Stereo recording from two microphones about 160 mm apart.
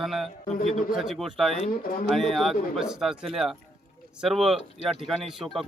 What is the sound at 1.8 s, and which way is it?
Speech, 65° left (ahead or behind).